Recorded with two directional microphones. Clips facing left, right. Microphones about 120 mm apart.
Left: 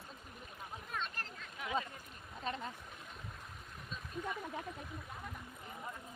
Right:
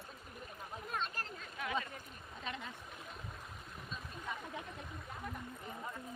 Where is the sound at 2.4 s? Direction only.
40° left (ahead or behind).